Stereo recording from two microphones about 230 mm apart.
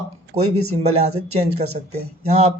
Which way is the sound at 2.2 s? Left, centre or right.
Right.